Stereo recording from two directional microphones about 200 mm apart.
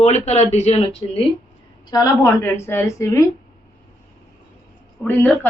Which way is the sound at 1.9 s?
20° left (ahead or behind).